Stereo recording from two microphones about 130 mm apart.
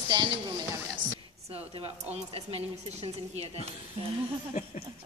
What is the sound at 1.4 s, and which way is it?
A woman's voice, 50° right (ahead or behind).